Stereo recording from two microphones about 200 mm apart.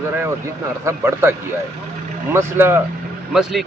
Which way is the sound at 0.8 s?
10° right (ahead or behind).